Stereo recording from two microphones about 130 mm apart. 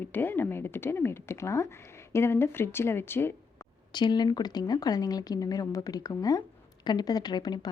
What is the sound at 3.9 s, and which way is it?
A woman's voice, 35° left (ahead or behind).